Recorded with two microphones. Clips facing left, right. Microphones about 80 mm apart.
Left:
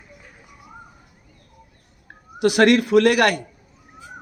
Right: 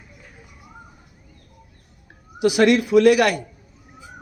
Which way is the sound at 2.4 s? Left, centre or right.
Left.